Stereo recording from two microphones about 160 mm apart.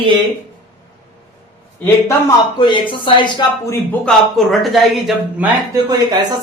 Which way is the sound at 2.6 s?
30° left (ahead or behind).